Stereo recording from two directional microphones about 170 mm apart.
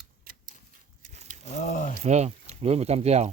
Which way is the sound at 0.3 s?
60° right (ahead or behind).